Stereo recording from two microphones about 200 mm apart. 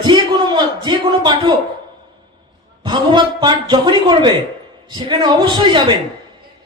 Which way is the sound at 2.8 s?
25° right (ahead or behind).